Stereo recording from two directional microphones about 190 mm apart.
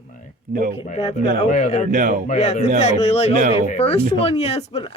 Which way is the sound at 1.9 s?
40° right (ahead or behind).